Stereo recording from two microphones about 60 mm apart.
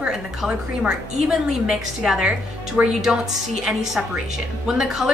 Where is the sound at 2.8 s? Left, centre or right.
Right.